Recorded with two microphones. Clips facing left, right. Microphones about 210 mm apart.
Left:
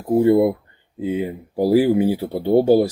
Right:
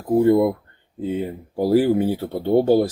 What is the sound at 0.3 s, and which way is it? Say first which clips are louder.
Speech: left 1 dB; 10° left (ahead or behind).